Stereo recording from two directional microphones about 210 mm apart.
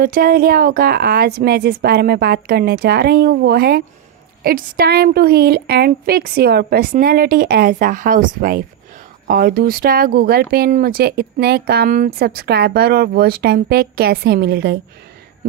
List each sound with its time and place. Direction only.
0.0 s speech: 45° right (ahead or behind)